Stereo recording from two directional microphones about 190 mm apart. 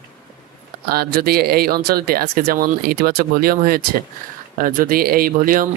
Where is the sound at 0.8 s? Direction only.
55° right (ahead or behind).